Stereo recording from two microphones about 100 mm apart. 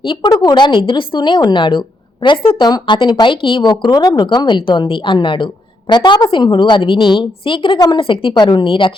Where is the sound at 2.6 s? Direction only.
45° left (ahead or behind).